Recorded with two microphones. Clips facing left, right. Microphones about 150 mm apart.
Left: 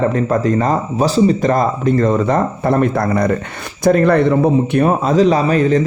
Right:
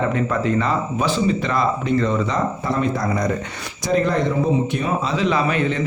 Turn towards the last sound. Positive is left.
turn(degrees=40)  # may be behind; listen again after turning